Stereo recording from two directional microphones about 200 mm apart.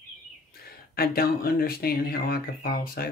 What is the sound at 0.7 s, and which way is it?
Speech, 50° left (ahead or behind).